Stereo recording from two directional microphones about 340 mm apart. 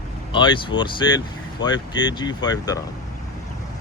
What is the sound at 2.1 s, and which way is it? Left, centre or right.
Speech, centre.